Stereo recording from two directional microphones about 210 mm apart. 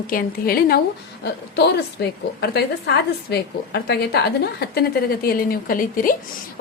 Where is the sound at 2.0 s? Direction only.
50° left (ahead or behind).